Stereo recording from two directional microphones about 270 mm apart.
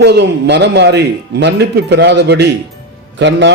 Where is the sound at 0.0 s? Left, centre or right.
Right.